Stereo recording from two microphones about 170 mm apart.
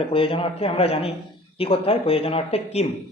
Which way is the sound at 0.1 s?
30° left (ahead or behind).